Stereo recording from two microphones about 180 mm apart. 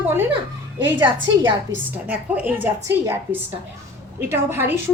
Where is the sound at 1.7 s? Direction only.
20° right (ahead or behind).